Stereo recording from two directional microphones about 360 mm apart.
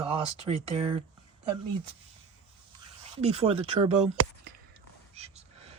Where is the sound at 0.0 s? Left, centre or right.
Centre.